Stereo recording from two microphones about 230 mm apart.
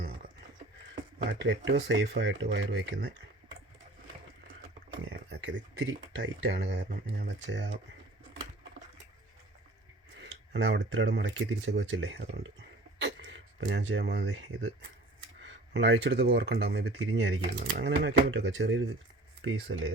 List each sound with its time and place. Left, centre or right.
1.3 s speech: right
5.1 s speech: right
10.5 s speech: right
13.0 s a sound: right
15.7 s speech: right